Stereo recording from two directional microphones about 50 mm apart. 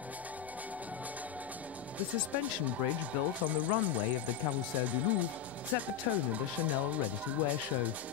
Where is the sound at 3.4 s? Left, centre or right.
Right.